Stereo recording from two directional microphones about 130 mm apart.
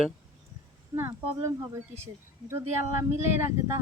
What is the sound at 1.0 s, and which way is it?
Speech, 20° right (ahead or behind).